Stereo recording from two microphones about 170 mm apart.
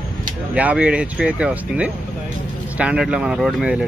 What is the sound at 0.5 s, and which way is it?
Speech, 10° right (ahead or behind).